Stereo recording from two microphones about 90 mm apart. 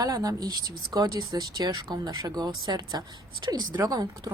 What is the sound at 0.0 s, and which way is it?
Speech, 45° right (ahead or behind).